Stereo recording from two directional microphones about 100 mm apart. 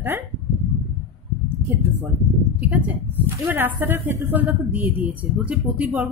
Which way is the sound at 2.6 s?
15° right (ahead or behind).